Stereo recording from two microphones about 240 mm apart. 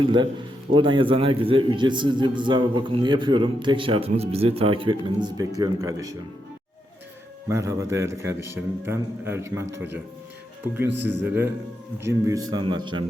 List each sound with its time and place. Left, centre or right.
0.0 s a man's voice: centre
7.4 s a man's voice: centre
11.0 s a man's voice: centre